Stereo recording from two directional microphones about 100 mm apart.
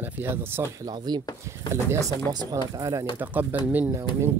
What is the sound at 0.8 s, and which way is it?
Speech, 45° right (ahead or behind).